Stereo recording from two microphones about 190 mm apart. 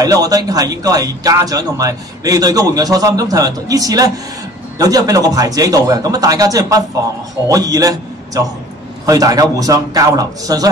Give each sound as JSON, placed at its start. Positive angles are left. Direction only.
{"t": 0.0, "sound": "a man's voice", "side_deg": -20}
{"t": 9.0, "sound": "a man's voice", "side_deg": -20}